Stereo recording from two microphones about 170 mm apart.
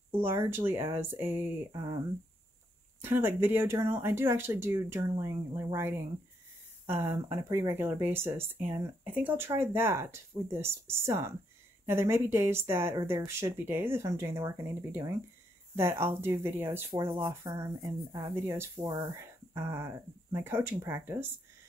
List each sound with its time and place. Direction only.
0.1 s speech: 15° right (ahead or behind)
1.7 s speech: 25° right (ahead or behind)
3.0 s speech: 10° right (ahead or behind)